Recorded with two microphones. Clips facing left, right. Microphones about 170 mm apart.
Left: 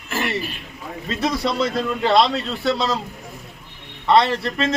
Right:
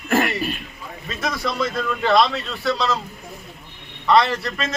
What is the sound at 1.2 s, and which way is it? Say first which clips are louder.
Speech: left 3 dB; 30° left (ahead or behind).